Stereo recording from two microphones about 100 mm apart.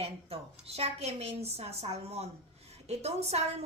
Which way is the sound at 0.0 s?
85° right.